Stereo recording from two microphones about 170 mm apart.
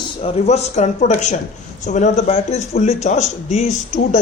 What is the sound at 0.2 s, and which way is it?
A man's voice, 40° left (ahead or behind).